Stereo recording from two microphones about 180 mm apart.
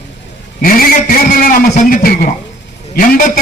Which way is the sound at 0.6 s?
55° left (ahead or behind).